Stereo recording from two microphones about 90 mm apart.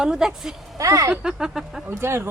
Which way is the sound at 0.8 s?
40° right (ahead or behind).